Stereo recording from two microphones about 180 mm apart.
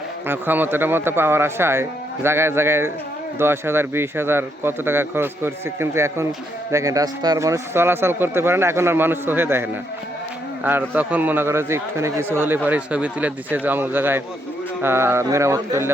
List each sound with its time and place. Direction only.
0.3 s a man's voice: 10° right (ahead or behind)